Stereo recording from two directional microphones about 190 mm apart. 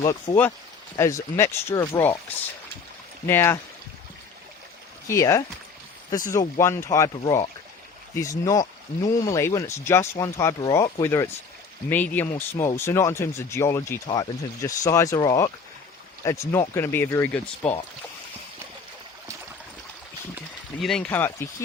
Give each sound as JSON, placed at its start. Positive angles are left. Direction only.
{"t": 0.0, "sound": "speech", "side_deg": 20}
{"t": 3.2, "sound": "speech", "side_deg": 15}
{"t": 5.0, "sound": "speech", "side_deg": 15}
{"t": 20.8, "sound": "speech", "side_deg": 5}